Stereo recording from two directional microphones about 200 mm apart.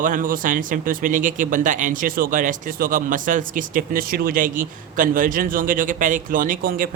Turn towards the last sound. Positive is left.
turn(degrees=-45)  # may be behind; listen again after turning